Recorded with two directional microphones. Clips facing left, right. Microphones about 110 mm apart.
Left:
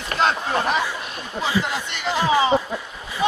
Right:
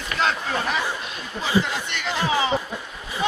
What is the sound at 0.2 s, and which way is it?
Speech, 30° left (ahead or behind).